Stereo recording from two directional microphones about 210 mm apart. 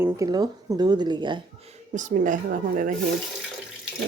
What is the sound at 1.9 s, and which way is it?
Speech, 35° right (ahead or behind).